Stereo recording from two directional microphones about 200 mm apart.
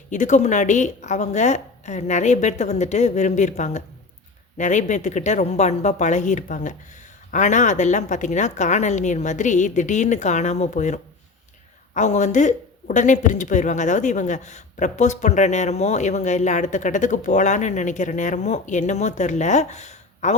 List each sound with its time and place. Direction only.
0.1 s speech: 40° left (ahead or behind)